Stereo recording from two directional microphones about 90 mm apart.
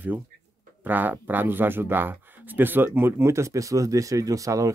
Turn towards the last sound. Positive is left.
turn(degrees=-35)  # may be behind; listen again after turning